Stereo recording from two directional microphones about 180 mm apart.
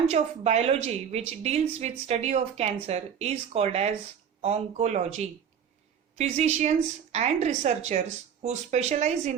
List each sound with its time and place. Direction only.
0.1 s a woman's voice: 40° right (ahead or behind)